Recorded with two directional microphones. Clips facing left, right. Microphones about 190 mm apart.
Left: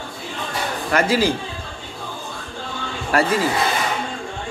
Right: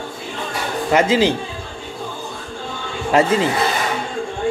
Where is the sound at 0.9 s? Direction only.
20° right (ahead or behind).